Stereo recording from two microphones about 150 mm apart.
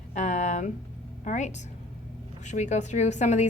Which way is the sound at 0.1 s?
50° left (ahead or behind).